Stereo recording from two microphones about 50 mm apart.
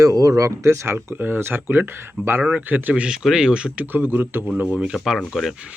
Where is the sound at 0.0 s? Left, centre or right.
Right.